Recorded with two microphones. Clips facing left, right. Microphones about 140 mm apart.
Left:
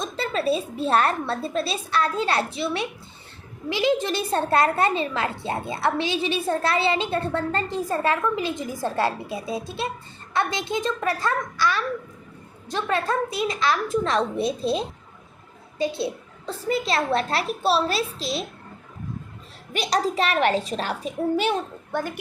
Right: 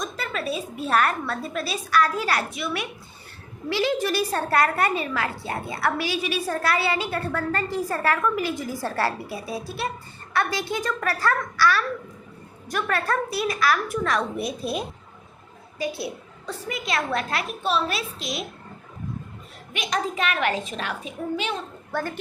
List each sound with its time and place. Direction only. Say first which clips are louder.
0.0 s a woman's voice: left 4 dB; 30° left (ahead or behind)
3.7 s a woman's voice: left 1 dB; 15° left (ahead or behind)
19.7 s a woman's voice: left 4 dB; 35° left (ahead or behind)
21.9 s a woman's voice: left 1 dB; 15° left (ahead or behind)